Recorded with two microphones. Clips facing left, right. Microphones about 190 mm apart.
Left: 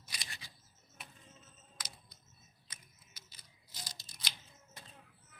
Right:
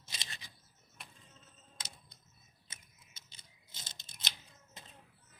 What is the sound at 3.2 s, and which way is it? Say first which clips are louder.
Typewriter: left 2 dB; 25° right (ahead or behind).